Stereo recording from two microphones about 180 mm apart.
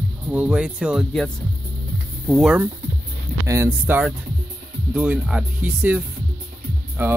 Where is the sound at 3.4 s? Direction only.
15° right (ahead or behind).